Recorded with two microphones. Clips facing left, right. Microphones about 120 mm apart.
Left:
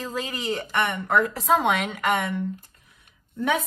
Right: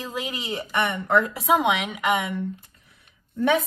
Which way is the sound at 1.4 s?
5° right (ahead or behind).